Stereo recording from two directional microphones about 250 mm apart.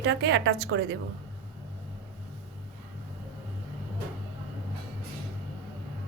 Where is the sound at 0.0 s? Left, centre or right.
Right.